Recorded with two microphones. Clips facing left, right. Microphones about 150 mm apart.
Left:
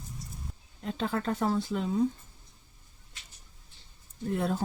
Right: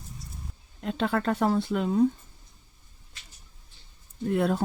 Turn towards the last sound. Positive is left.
turn(degrees=-70)  # may be behind; listen again after turning